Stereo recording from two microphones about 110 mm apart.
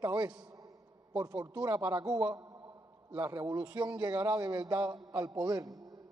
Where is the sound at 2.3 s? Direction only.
30° right (ahead or behind).